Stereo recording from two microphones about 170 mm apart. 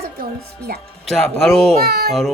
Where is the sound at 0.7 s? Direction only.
60° right (ahead or behind).